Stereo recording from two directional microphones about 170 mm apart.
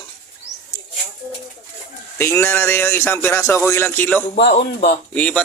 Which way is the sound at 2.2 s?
15° left (ahead or behind).